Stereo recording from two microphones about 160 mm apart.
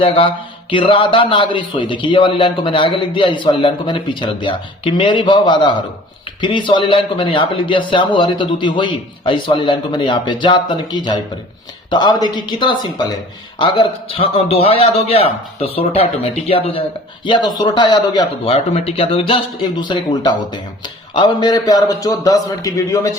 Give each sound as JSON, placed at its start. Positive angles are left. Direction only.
{"t": 0.0, "sound": "a man's voice", "side_deg": 35}
{"t": 18.5, "sound": "a man's voice", "side_deg": 40}